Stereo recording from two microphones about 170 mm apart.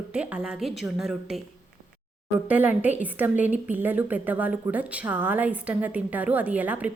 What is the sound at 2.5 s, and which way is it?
A woman's voice, 10° right (ahead or behind).